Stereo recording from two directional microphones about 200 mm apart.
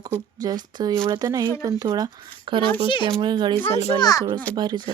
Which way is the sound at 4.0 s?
15° left (ahead or behind).